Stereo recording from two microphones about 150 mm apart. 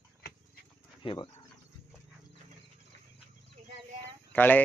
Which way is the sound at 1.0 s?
35° left (ahead or behind).